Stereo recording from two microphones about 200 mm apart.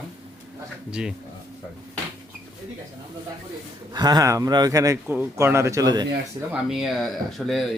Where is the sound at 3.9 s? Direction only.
20° right (ahead or behind).